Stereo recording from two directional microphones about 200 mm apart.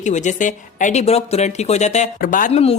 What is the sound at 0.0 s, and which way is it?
Speech, 35° left (ahead or behind).